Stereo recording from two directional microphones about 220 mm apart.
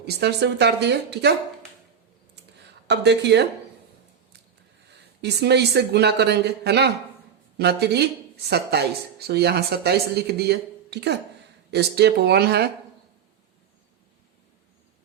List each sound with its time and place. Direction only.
0.0 s a woman's voice: 50° right (ahead or behind)
2.8 s a woman's voice: 50° right (ahead or behind)
5.2 s a woman's voice: 50° right (ahead or behind)